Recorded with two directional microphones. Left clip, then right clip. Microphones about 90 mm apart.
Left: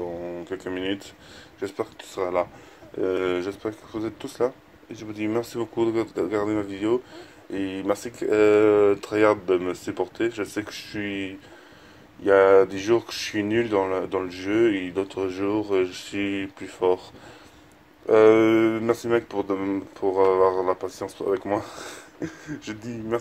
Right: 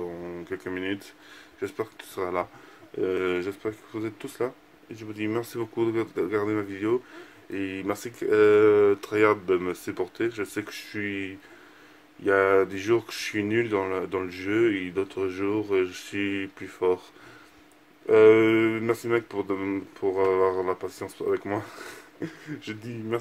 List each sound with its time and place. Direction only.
0.7 s speech: 15° left (ahead or behind)
12.3 s speech: 15° left (ahead or behind)
18.0 s speech: 25° left (ahead or behind)